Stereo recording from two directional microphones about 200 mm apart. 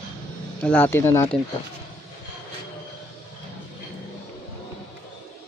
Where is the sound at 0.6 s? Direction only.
5° left (ahead or behind).